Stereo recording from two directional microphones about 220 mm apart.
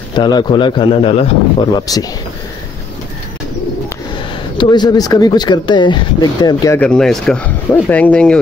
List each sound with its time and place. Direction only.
0.1 s speech: 20° left (ahead or behind)
4.6 s speech: 20° left (ahead or behind)